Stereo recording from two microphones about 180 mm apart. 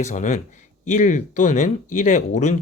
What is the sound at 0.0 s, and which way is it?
Speech, 40° left (ahead or behind).